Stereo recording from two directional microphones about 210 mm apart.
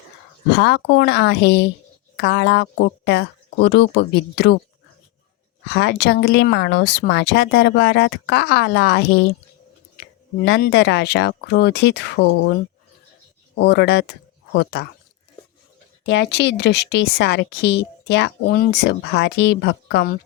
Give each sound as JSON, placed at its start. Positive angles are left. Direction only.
{"t": 0.5, "sound": "speech", "side_deg": 50}
{"t": 5.6, "sound": "speech", "side_deg": 55}
{"t": 10.4, "sound": "speech", "side_deg": 55}
{"t": 13.6, "sound": "speech", "side_deg": 55}
{"t": 16.0, "sound": "speech", "side_deg": 55}